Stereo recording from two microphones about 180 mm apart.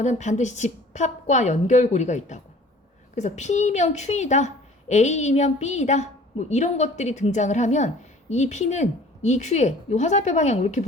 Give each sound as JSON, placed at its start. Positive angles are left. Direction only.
{"t": 0.0, "sound": "a woman's voice", "side_deg": 40}